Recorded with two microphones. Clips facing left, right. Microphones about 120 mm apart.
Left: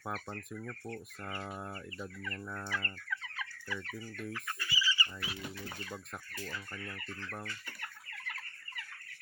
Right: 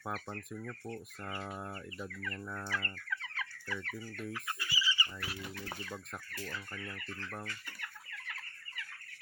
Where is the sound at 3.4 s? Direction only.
10° left (ahead or behind).